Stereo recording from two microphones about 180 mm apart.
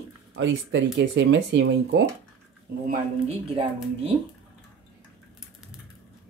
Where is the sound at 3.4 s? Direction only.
30° right (ahead or behind).